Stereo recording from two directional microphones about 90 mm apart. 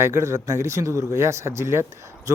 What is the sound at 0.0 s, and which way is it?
Speech, 30° right (ahead or behind).